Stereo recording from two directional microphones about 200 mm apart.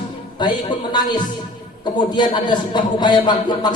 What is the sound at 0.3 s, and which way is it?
A man's voice, 20° left (ahead or behind).